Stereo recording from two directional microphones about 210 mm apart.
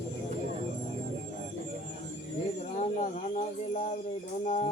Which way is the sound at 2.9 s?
35° left (ahead or behind).